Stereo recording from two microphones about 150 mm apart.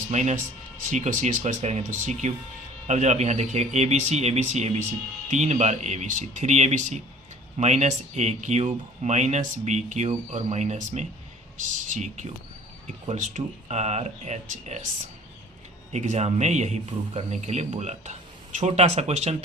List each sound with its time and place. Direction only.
0.1 s a man's voice: 50° right (ahead or behind)
15.9 s a man's voice: 50° right (ahead or behind)